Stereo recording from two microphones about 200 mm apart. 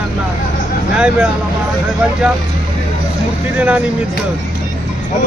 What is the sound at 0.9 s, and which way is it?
Speech, 5° right (ahead or behind).